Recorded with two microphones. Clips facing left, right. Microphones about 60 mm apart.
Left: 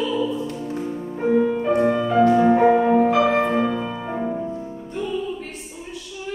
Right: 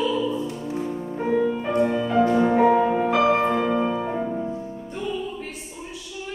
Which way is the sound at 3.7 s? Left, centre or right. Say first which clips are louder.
Right 4 dB; centre.